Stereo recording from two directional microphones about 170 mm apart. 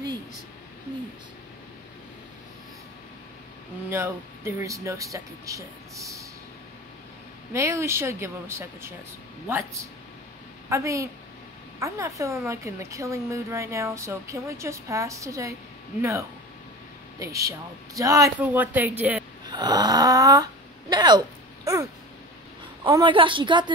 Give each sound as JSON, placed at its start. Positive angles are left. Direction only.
{"t": 3.9, "sound": "speech", "side_deg": -15}
{"t": 7.5, "sound": "a woman's voice", "side_deg": -15}
{"t": 19.4, "sound": "speech", "side_deg": -25}
{"t": 22.8, "sound": "speech", "side_deg": -25}